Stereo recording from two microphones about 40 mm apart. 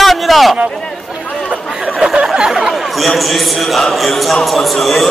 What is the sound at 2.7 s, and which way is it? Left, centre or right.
Speech, centre.